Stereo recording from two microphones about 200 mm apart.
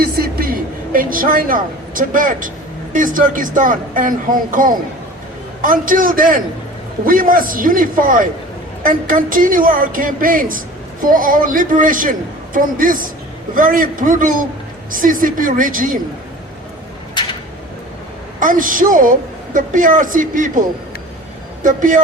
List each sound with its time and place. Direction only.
0.0 s a sound: 50° right (ahead or behind)
2.9 s speech: 40° right (ahead or behind)
18.3 s speech: 40° right (ahead or behind)